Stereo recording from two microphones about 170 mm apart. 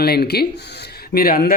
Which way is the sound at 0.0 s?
70° left (ahead or behind).